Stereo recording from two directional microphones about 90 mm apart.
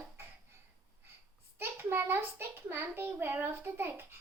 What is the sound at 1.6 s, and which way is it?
A child's voice, 25° right (ahead or behind).